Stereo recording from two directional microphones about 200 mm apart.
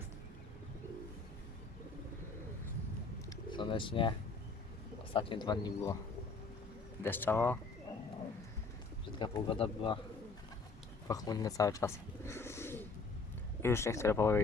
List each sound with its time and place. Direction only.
3.2 s bird: 25° left (ahead or behind)
5.1 s speech: 25° left (ahead or behind)
7.0 s speech: 10° left (ahead or behind)
9.1 s speech: 25° left (ahead or behind)
11.1 s bird: 20° left (ahead or behind)
13.6 s speech: 10° left (ahead or behind)